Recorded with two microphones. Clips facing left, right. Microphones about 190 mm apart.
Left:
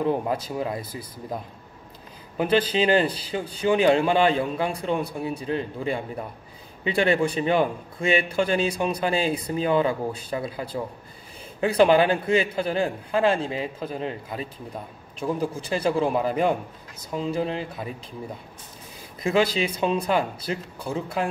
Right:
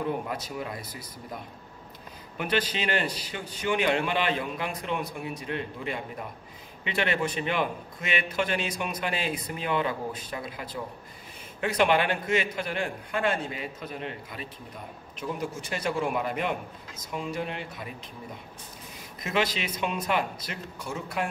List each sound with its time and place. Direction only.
0.0 s speech: 30° left (ahead or behind)
2.3 s a man's voice: 30° left (ahead or behind)
19.3 s a man's voice: 35° left (ahead or behind)